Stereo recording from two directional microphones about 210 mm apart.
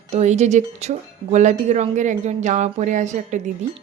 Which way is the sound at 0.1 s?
30° right (ahead or behind).